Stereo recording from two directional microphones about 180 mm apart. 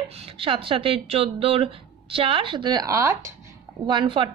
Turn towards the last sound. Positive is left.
turn(degrees=-30)  # may be behind; listen again after turning